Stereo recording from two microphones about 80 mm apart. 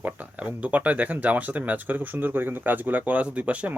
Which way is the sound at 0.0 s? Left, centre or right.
Centre.